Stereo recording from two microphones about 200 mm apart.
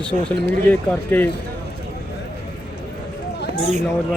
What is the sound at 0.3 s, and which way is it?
Speech, 10° left (ahead or behind).